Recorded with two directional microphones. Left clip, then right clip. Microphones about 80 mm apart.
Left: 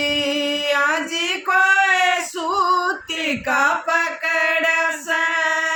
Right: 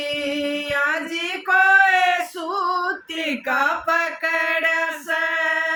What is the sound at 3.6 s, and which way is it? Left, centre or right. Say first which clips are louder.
Mantra: left 2 dB; right.